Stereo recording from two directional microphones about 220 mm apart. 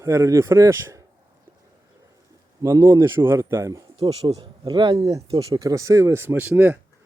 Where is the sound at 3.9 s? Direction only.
25° right (ahead or behind).